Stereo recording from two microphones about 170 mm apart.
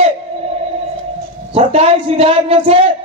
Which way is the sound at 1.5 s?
35° right (ahead or behind).